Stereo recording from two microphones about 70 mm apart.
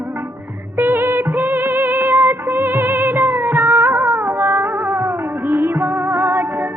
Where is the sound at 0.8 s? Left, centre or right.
Right.